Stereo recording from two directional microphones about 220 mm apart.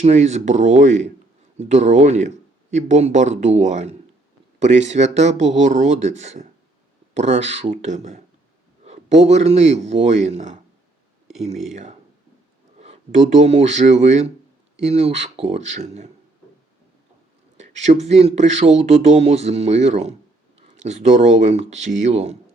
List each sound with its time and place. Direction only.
0.0 s a man's voice: 30° right (ahead or behind)
17.6 s speech: 30° right (ahead or behind)